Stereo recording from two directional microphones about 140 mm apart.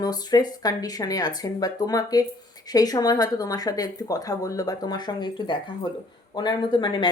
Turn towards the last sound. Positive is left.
turn(degrees=30)  # may be behind; listen again after turning